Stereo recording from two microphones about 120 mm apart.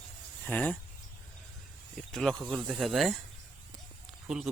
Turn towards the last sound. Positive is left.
turn(degrees=-5)  # may be behind; listen again after turning